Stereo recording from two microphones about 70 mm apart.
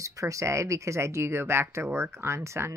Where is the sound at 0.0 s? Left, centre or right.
Right.